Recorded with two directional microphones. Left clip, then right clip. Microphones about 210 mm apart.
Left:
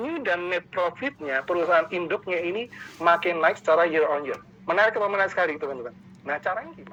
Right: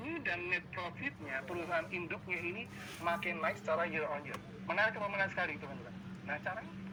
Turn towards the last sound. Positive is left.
turn(degrees=35)  # may be behind; listen again after turning